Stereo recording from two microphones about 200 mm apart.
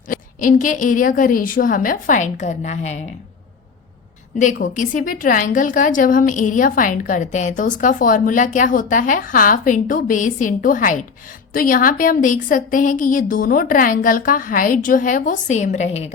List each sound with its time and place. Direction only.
0.1 s a woman's voice: 40° left (ahead or behind)
4.4 s a woman's voice: 40° left (ahead or behind)